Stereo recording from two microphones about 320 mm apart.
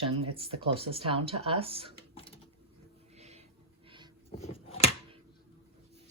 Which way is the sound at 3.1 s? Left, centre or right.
Centre.